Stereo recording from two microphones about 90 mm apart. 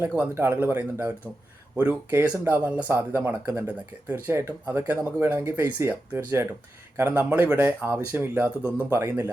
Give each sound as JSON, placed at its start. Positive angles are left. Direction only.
{"t": 0.3, "sound": "speech", "side_deg": -25}